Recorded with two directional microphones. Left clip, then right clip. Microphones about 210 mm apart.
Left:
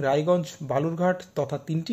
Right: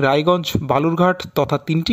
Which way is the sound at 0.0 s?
30° right (ahead or behind).